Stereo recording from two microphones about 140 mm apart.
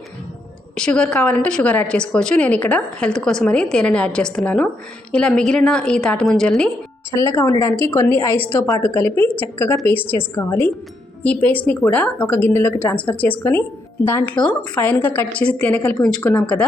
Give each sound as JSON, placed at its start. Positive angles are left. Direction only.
{"t": 0.8, "sound": "a woman's voice", "side_deg": 5}
{"t": 7.1, "sound": "a woman's voice", "side_deg": 20}